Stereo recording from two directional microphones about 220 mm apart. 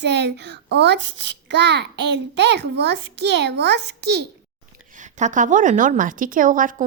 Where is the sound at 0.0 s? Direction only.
50° right (ahead or behind).